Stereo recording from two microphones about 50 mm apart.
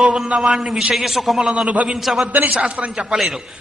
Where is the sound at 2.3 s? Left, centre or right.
Right.